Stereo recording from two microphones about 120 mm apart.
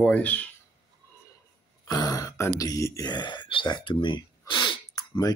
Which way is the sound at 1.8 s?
30° left (ahead or behind).